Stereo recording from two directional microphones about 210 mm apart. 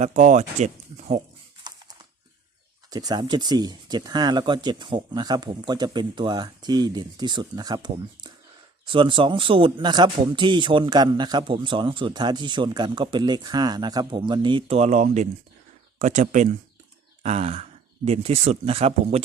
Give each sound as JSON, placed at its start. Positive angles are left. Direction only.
{"t": 0.0, "sound": "speech", "side_deg": -35}
{"t": 2.9, "sound": "a man's voice", "side_deg": -20}